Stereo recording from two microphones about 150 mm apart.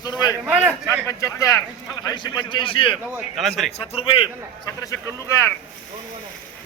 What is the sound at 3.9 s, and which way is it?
Speech, 40° left (ahead or behind).